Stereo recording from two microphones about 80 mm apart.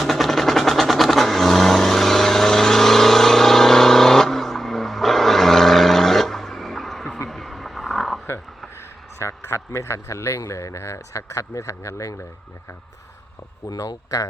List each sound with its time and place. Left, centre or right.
0.0 s vehicle: centre
7.3 s a sound: centre
9.1 s speech: left
13.7 s speech: left